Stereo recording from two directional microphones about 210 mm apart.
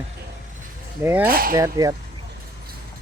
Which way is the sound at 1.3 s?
45° right (ahead or behind).